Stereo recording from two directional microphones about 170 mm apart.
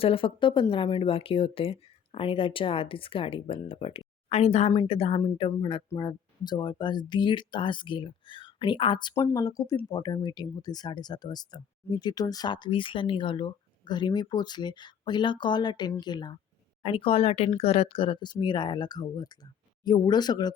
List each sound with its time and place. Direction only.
0.0 s speech: 30° left (ahead or behind)